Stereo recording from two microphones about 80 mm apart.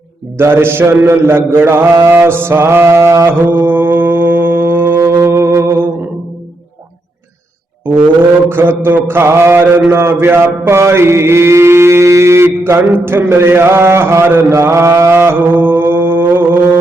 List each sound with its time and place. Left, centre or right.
0.3 s mantra: right
8.4 s a man's voice: right
8.8 s mantra: right